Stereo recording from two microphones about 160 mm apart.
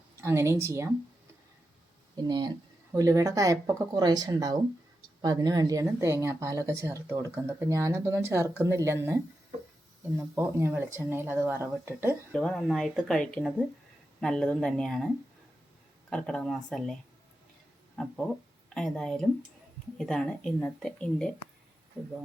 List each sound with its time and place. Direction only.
0.2 s speech: 15° right (ahead or behind)
2.1 s speech: 25° right (ahead or behind)
12.3 s speech: 5° left (ahead or behind)
16.0 s speech: 5° left (ahead or behind)